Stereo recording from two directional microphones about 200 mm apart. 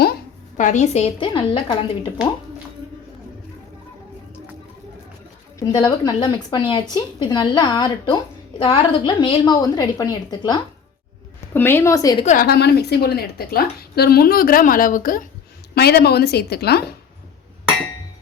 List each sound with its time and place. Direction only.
0.5 s a woman's voice: 40° left (ahead or behind)
5.5 s a woman's voice: 15° left (ahead or behind)
12.2 s a woman's voice: 40° left (ahead or behind)
12.5 s a woman's voice: 55° left (ahead or behind)